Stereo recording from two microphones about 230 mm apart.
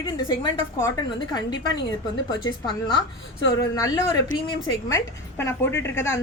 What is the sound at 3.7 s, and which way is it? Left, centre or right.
A woman's voice, centre.